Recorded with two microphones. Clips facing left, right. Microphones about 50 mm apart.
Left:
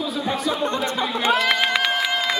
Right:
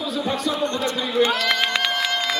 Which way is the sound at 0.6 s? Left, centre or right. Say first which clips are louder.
Left 1 dB; centre.